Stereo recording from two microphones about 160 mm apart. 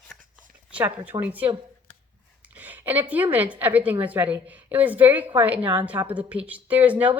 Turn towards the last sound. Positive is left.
turn(degrees=-10)  # may be behind; listen again after turning